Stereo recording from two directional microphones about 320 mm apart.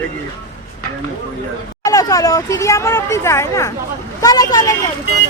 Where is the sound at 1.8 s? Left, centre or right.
Centre.